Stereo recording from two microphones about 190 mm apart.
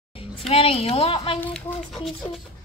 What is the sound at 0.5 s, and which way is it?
Speech, 30° left (ahead or behind).